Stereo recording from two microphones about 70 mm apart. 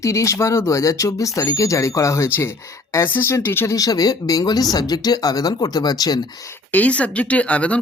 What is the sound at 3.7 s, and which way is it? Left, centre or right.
Speech, left.